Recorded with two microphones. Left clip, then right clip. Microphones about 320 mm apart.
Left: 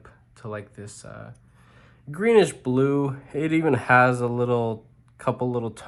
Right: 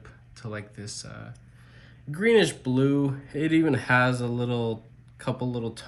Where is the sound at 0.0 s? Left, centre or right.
Centre.